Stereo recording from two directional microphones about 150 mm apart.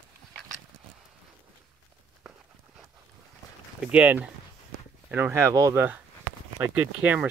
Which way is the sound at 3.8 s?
10° right (ahead or behind).